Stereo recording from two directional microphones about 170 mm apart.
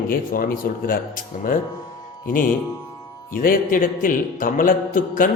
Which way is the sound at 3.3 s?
55° left (ahead or behind).